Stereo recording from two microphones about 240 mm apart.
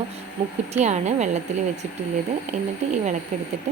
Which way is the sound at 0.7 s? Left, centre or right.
Right.